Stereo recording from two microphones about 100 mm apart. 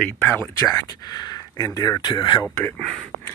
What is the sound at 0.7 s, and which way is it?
Speech, 40° left (ahead or behind).